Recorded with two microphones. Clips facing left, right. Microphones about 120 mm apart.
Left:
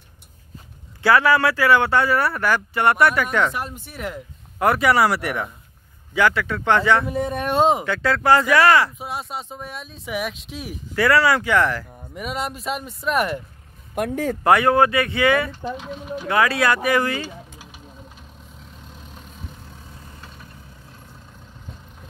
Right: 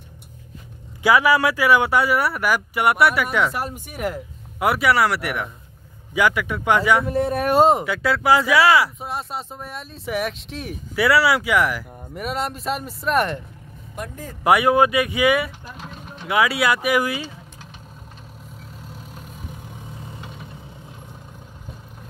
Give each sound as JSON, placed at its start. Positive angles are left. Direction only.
{"t": 1.0, "sound": "speech", "side_deg": -10}
{"t": 6.1, "sound": "speech", "side_deg": -15}
{"t": 11.0, "sound": "speech", "side_deg": -10}
{"t": 13.9, "sound": "speech", "side_deg": 75}
{"t": 14.4, "sound": "speech", "side_deg": -10}
{"t": 18.9, "sound": "vehicle", "side_deg": -5}